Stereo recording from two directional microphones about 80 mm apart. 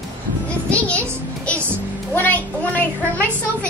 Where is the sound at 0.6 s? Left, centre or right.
Centre.